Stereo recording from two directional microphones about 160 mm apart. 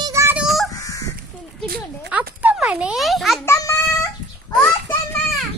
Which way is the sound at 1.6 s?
65° right (ahead or behind).